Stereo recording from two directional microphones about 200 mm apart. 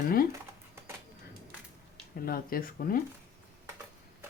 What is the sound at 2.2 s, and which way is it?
Speech, 45° left (ahead or behind).